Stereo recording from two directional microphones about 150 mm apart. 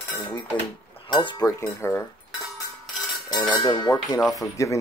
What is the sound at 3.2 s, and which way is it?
Cutlery, 30° left (ahead or behind).